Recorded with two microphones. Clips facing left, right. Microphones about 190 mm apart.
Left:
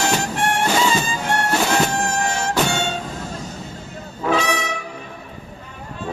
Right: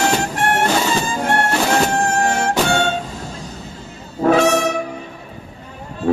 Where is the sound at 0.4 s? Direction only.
55° right (ahead or behind).